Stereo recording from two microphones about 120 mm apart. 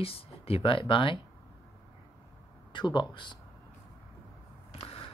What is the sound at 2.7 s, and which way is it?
Speech, 35° left (ahead or behind).